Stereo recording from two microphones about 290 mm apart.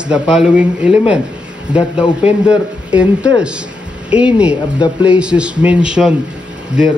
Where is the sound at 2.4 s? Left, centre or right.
Centre.